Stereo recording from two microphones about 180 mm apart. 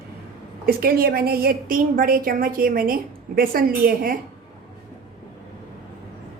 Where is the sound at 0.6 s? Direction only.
55° right (ahead or behind).